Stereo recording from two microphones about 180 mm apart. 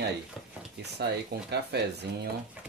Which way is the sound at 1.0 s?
65° right (ahead or behind).